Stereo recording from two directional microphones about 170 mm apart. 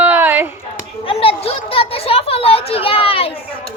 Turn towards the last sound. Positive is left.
turn(degrees=35)  # may be behind; listen again after turning